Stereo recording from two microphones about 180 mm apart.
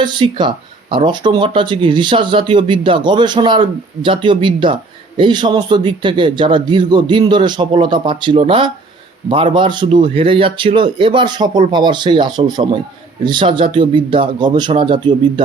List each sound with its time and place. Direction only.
0.0 s speech: 25° right (ahead or behind)